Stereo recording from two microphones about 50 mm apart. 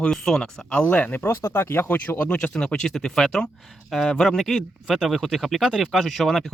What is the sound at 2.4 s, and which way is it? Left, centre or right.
Speech, centre.